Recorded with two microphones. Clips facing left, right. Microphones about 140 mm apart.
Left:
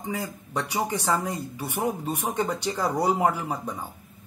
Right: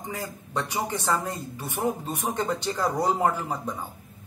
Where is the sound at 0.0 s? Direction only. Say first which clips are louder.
Left 3 dB; 10° left (ahead or behind).